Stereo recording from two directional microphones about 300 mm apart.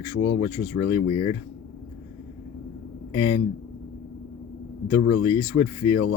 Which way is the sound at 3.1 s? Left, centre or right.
Left.